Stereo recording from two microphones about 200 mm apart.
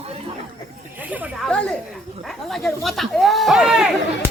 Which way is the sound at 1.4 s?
5° left (ahead or behind).